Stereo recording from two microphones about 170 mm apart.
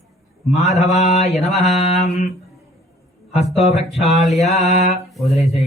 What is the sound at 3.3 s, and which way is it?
Speech, 35° left (ahead or behind).